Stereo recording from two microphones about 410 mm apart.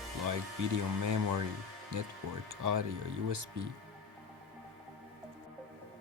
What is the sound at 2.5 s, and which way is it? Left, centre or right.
Speech, right.